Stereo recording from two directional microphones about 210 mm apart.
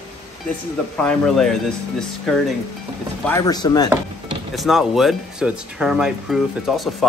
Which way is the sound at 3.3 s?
15° left (ahead or behind).